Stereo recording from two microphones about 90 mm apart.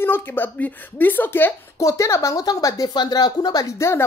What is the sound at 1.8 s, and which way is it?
Speech, 35° left (ahead or behind).